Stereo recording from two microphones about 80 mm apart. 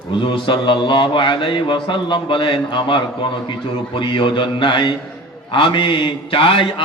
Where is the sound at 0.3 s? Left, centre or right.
Left.